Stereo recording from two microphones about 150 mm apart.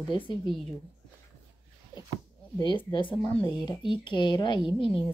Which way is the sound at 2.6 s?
30° left (ahead or behind).